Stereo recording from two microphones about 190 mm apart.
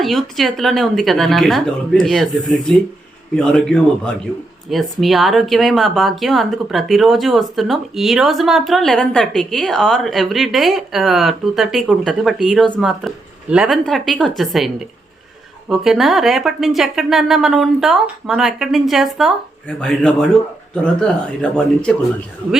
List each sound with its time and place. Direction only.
0.0 s speech: centre (ahead or behind)
15.8 s speech: centre (ahead or behind)